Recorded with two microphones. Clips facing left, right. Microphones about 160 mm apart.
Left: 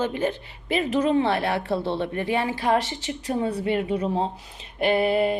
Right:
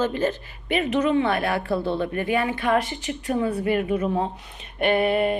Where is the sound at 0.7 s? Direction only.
30° left (ahead or behind).